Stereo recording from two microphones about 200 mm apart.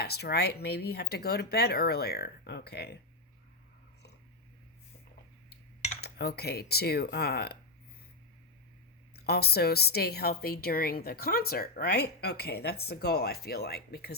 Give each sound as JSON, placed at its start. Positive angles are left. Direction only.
{"t": 0.0, "sound": "a woman's voice", "side_deg": 55}
{"t": 6.0, "sound": "a woman's voice", "side_deg": 55}
{"t": 9.1, "sound": "a woman's voice", "side_deg": 55}